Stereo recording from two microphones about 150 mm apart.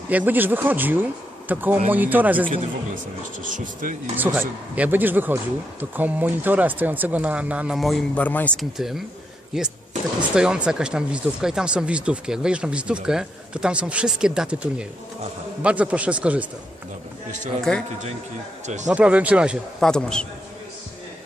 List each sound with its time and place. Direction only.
0.1 s speech: 10° right (ahead or behind)
3.4 s speech: 60° right (ahead or behind)
4.4 s speech: 10° right (ahead or behind)
8.1 s speech: 10° left (ahead or behind)
8.8 s speech: centre (ahead or behind)
17.6 s speech: 5° left (ahead or behind)
18.6 s speech: 50° right (ahead or behind)
18.9 s speech: 10° right (ahead or behind)
19.9 s speech: 5° left (ahead or behind)